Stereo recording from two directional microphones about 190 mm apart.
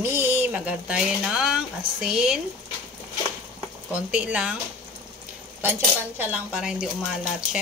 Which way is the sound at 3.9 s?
5° right (ahead or behind).